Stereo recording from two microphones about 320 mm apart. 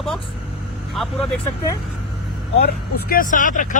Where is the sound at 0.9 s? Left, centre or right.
Centre.